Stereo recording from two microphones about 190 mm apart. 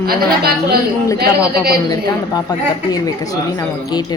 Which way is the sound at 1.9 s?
20° left (ahead or behind).